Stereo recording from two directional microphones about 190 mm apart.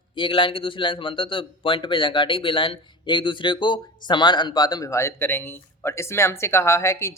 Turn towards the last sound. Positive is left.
turn(degrees=15)  # may be behind; listen again after turning